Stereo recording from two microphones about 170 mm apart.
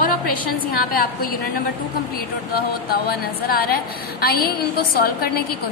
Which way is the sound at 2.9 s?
65° left (ahead or behind).